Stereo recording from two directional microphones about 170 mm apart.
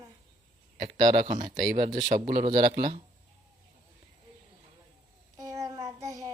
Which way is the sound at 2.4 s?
30° right (ahead or behind).